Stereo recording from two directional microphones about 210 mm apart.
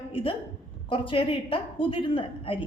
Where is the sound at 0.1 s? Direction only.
25° left (ahead or behind).